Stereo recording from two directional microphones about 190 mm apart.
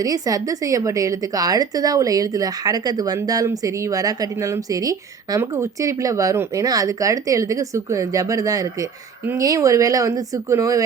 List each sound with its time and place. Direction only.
0.0 s speech: 20° right (ahead or behind)